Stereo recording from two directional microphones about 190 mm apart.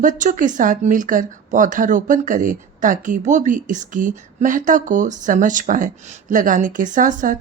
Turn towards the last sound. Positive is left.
turn(degrees=-45)  # may be behind; listen again after turning